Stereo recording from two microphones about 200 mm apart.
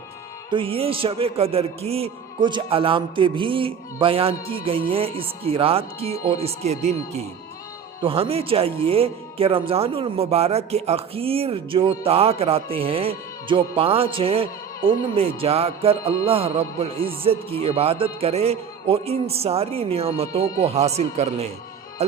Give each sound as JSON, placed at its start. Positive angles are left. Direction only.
{"t": 0.5, "sound": "a man's voice", "side_deg": -25}
{"t": 8.0, "sound": "a man's voice", "side_deg": -30}